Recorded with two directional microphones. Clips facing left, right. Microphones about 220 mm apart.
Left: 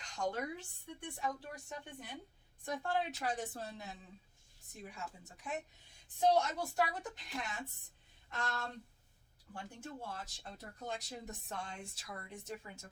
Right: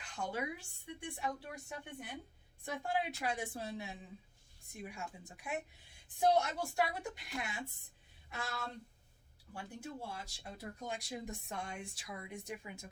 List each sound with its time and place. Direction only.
0.0 s speech: 10° right (ahead or behind)